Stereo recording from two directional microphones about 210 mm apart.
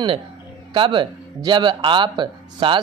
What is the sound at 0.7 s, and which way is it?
Speech, 25° right (ahead or behind).